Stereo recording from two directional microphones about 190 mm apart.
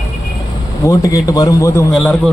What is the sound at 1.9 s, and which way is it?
Speech, centre (ahead or behind).